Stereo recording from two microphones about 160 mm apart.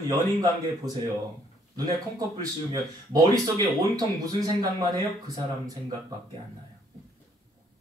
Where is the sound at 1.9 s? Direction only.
25° right (ahead or behind).